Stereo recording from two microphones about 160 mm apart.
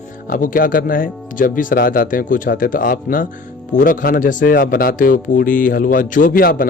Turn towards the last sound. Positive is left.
turn(degrees=65)  # may be behind; listen again after turning